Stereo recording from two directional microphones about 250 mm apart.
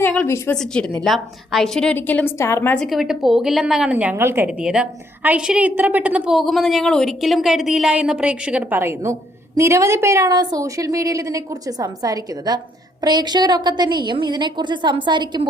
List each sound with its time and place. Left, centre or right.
0.0 s a woman's voice: centre